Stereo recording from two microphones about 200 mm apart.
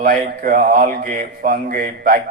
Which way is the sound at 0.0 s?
45° right (ahead or behind).